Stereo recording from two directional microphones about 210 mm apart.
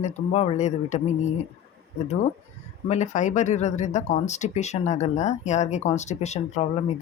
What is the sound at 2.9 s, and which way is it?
Speech, 35° left (ahead or behind).